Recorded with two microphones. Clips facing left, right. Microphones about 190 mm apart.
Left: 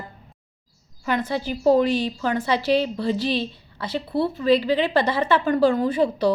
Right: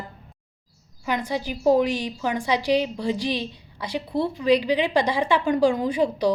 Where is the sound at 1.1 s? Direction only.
15° right (ahead or behind).